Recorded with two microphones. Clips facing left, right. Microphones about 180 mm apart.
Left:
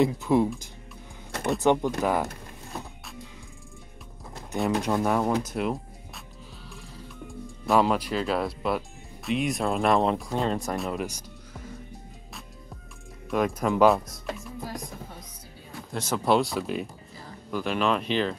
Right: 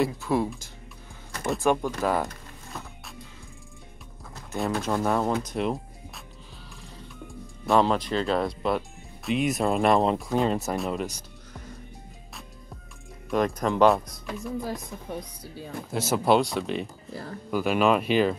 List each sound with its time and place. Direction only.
0.0 s speech: 20° left (ahead or behind)
1.6 s speech: 20° left (ahead or behind)
4.6 s speech: 15° left (ahead or behind)
7.2 s speech: centre (ahead or behind)
11.1 s music: 10° left (ahead or behind)
13.3 s speech: 5° left (ahead or behind)
15.9 s speech: 5° right (ahead or behind)
17.1 s speech: 70° right (ahead or behind)
17.5 s speech: 5° right (ahead or behind)